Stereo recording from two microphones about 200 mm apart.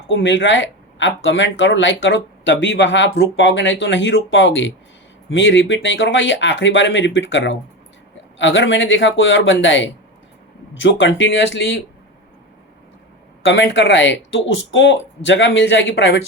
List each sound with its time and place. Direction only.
0.1 s speech: 65° left (ahead or behind)
13.4 s speech: 65° left (ahead or behind)